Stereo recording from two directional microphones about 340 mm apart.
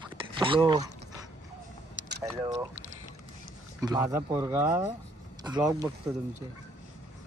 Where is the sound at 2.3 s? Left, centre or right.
Centre.